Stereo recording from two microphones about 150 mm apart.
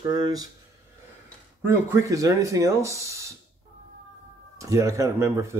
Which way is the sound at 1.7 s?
20° right (ahead or behind).